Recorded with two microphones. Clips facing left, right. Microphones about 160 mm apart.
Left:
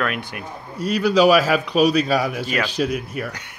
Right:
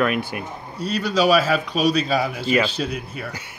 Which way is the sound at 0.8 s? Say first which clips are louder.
Left 4 dB; 10° left (ahead or behind).